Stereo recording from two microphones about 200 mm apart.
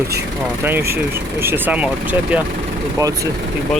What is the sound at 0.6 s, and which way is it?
Speech, 10° right (ahead or behind).